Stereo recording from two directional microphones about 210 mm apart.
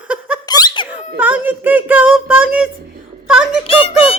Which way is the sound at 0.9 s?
5° right (ahead or behind).